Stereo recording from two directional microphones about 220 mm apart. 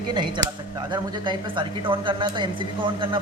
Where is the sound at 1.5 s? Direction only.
20° right (ahead or behind).